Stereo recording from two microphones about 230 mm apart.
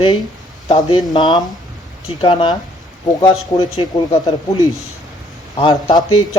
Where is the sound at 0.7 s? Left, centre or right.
Centre.